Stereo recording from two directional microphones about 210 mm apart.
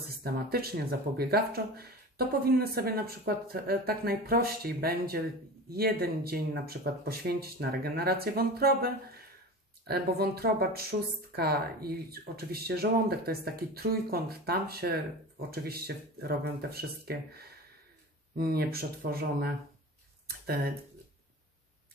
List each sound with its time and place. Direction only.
0.2 s speech: 45° right (ahead or behind)
18.3 s speech: 45° right (ahead or behind)